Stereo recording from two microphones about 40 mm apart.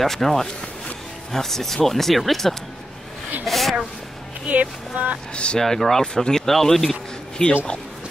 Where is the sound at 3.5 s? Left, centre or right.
Centre.